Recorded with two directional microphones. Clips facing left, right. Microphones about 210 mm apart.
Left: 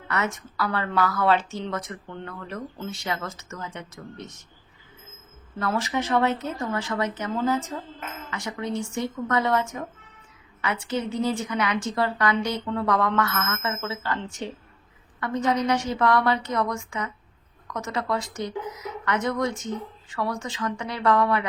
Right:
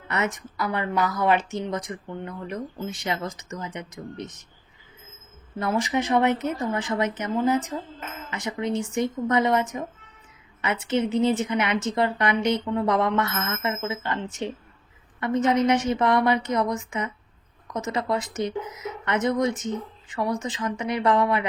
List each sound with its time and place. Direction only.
0.1 s speech: 20° right (ahead or behind)
5.5 s a woman's voice: 15° right (ahead or behind)